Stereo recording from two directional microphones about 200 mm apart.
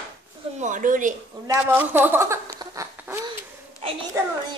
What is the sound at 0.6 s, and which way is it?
Speech, 40° right (ahead or behind).